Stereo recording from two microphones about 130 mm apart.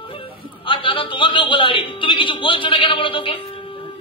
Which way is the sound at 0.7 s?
40° left (ahead or behind).